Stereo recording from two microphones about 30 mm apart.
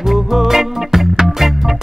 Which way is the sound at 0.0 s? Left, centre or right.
Centre.